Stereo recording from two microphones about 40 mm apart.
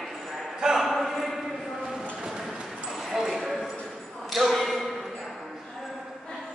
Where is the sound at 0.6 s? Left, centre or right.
Centre.